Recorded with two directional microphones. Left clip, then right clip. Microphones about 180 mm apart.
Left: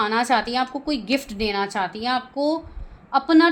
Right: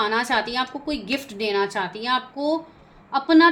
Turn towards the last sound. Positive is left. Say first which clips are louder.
# right 1 dB
turn(degrees=45)  # may be behind; listen again after turning